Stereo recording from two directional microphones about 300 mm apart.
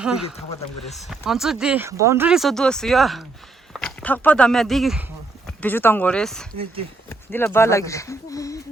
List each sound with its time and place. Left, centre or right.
0.0 s speech: centre